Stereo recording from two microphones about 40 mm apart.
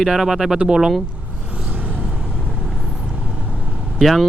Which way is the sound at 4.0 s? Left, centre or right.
Centre.